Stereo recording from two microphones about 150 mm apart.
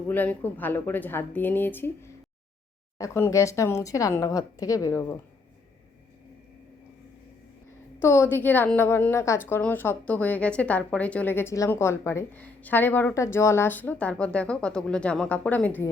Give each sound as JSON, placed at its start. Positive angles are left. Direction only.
{"t": 0.1, "sound": "a woman's voice", "side_deg": 10}
{"t": 8.0, "sound": "a woman's voice", "side_deg": 20}